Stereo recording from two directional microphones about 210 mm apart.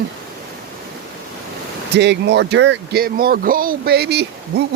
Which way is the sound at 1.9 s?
55° right (ahead or behind).